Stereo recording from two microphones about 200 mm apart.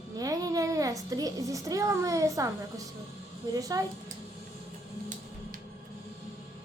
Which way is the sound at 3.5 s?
15° right (ahead or behind).